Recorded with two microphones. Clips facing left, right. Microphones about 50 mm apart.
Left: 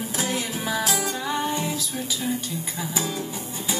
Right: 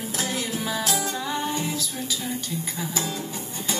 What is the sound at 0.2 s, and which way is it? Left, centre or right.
Music, left.